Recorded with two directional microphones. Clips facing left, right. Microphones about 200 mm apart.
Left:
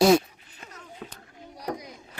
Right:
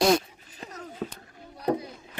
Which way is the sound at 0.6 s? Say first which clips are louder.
Right 7 dB; 40° right (ahead or behind).